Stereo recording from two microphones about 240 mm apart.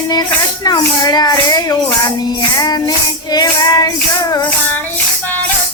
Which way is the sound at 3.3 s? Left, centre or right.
Centre.